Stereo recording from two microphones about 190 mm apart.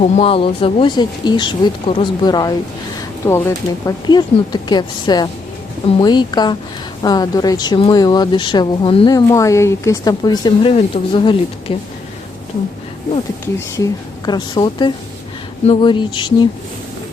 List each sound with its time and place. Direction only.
0.0 s speech: 30° left (ahead or behind)
13.7 s speech: 20° left (ahead or behind)